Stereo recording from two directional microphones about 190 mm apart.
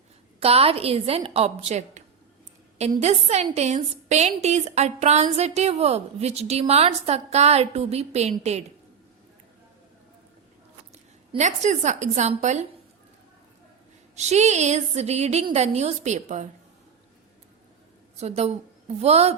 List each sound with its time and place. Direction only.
0.3 s a woman's voice: 30° right (ahead or behind)
11.3 s a woman's voice: 40° right (ahead or behind)
14.2 s a woman's voice: 35° right (ahead or behind)
18.2 s a woman's voice: 35° right (ahead or behind)